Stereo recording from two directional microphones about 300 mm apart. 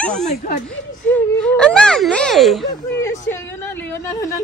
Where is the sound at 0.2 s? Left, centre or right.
Left.